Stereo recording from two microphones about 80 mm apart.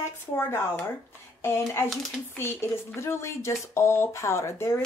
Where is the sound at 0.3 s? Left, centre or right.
Left.